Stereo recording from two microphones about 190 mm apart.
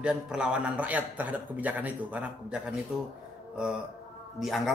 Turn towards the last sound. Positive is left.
turn(degrees=0)  # may be behind; listen again after turning